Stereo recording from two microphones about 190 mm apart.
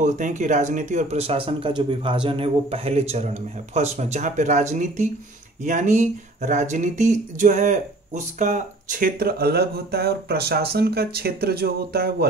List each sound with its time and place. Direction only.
0.0 s speech: 40° right (ahead or behind)